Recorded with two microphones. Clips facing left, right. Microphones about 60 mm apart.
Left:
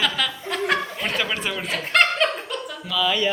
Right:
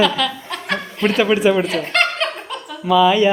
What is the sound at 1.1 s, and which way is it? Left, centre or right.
Speech, centre.